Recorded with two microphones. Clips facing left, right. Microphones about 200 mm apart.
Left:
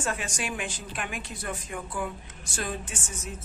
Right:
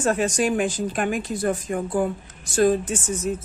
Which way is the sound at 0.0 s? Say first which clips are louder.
Right 11 dB; 40° right (ahead or behind).